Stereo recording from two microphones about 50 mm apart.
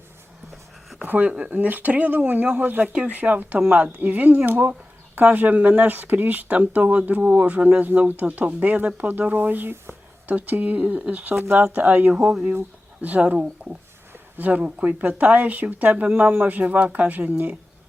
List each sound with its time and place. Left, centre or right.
1.0 s speech: right
12.1 s speech: centre
12.5 s speech: right